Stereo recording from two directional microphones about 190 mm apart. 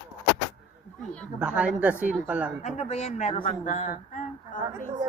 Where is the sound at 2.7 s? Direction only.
35° left (ahead or behind).